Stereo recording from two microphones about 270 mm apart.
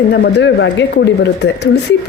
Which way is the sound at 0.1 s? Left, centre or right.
Left.